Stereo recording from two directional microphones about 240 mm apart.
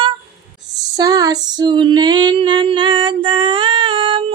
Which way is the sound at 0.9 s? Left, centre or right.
Centre.